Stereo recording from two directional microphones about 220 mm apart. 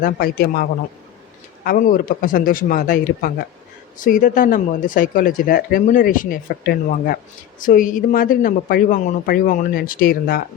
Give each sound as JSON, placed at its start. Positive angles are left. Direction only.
{"t": 0.0, "sound": "a man's voice", "side_deg": 45}